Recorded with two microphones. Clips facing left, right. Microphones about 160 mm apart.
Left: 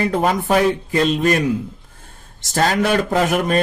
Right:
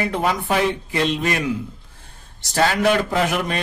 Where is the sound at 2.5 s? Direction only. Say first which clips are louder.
Left 1 dB; 45° left (ahead or behind).